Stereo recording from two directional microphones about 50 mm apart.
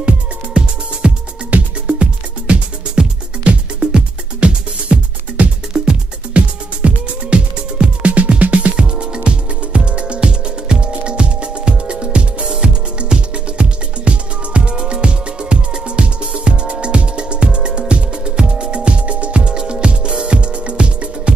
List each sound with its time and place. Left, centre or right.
1.0 s music: right